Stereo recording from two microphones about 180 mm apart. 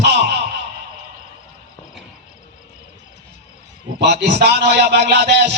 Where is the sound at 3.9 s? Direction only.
65° right (ahead or behind).